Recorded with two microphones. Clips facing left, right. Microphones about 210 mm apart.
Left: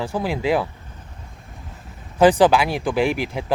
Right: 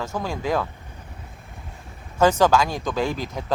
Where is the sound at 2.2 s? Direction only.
15° left (ahead or behind).